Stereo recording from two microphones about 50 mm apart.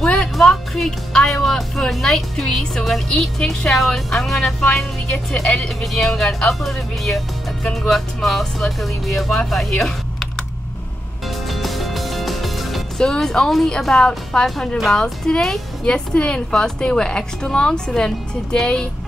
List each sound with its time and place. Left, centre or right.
0.4 s a woman's voice: centre
11.4 s music: centre
13.0 s a woman's voice: centre